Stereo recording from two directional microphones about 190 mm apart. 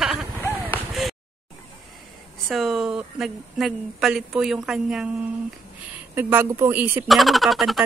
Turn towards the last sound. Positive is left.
turn(degrees=0)  # may be behind; listen again after turning